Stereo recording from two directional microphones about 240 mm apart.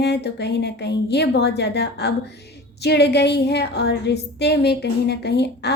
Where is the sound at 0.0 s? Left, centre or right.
Left.